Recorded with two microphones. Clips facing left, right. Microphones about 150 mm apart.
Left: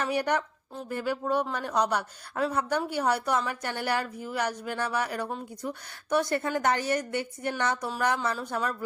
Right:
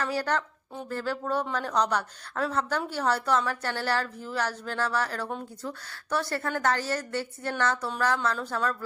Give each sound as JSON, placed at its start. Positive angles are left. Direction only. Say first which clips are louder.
{"t": 0.0, "sound": "a woman's voice", "louder": "left 1 dB", "side_deg": 20}